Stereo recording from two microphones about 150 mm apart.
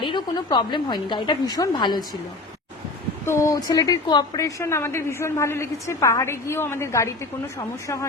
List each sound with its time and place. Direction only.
0.0 s a woman's voice: 30° left (ahead or behind)
3.2 s a woman's voice: 20° left (ahead or behind)